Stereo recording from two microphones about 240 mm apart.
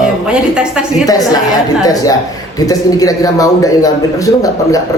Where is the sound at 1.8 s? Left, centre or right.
Centre.